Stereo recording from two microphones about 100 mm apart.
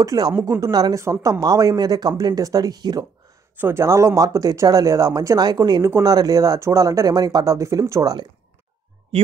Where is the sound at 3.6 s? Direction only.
25° right (ahead or behind); by 5.8 s 45° right (ahead or behind).